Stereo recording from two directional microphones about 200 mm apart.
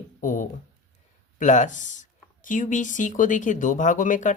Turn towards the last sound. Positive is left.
turn(degrees=40)  # may be behind; listen again after turning